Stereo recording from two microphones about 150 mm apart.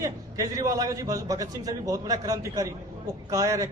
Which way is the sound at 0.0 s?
25° right (ahead or behind).